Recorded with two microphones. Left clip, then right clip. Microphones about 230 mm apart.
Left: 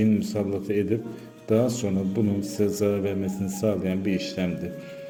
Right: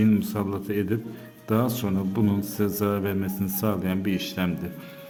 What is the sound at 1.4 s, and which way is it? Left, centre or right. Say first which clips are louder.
A man's voice: left 3 dB; centre.